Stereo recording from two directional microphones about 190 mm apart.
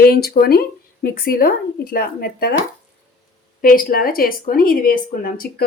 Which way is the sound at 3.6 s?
50° left (ahead or behind).